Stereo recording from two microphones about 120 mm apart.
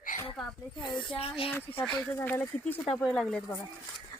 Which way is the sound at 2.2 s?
15° left (ahead or behind).